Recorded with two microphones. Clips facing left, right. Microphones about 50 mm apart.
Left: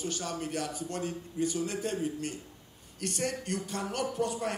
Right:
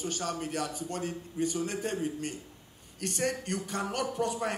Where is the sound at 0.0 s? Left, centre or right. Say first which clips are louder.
Right 1 dB; right.